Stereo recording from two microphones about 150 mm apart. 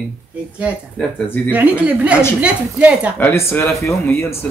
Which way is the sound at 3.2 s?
15° left (ahead or behind).